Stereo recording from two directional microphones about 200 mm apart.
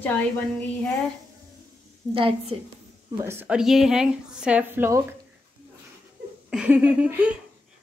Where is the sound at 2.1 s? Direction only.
25° right (ahead or behind).